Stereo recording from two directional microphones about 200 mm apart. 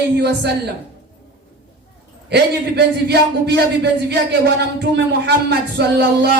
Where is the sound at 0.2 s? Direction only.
55° right (ahead or behind).